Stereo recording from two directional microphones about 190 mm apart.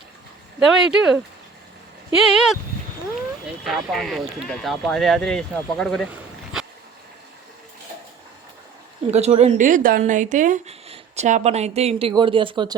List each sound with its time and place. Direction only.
0.6 s speech: centre (ahead or behind)
3.6 s speech: centre (ahead or behind)
6.1 s a sound: centre (ahead or behind)
9.0 s speech: 35° right (ahead or behind)